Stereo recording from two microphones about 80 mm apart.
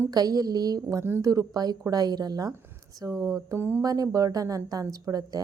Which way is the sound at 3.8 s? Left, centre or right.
Right.